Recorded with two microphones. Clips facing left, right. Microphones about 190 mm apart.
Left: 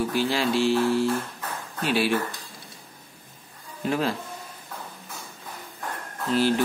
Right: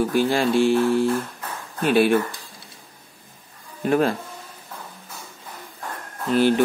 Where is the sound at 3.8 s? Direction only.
50° right (ahead or behind).